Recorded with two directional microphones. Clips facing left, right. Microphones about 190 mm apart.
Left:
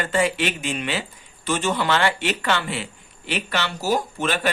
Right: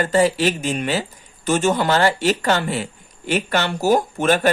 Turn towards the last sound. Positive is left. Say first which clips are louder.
# right 6 dB
turn(degrees=-45)  # may be behind; listen again after turning